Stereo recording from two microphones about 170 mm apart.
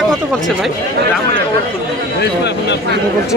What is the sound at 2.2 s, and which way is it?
Speech, 85° left.